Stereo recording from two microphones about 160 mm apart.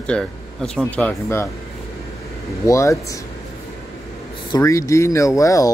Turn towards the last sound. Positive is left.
turn(degrees=20)  # may be behind; listen again after turning